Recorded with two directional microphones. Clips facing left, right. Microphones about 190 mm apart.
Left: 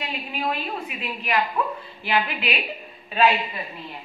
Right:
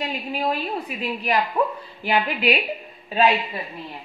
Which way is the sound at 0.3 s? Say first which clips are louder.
Right 3 dB; 40° right (ahead or behind).